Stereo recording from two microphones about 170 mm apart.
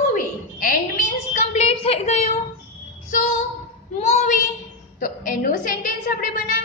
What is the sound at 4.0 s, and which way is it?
Child singing, 40° left (ahead or behind).